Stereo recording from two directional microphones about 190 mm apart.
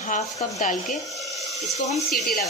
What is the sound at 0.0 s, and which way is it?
Speech, 40° left (ahead or behind).